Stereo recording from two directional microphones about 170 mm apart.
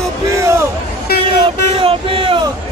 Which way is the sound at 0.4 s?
15° right (ahead or behind).